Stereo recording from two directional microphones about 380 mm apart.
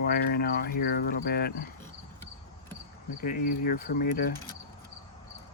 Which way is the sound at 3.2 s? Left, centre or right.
Left.